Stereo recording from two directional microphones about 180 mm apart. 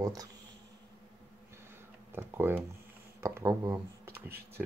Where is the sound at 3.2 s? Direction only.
15° right (ahead or behind).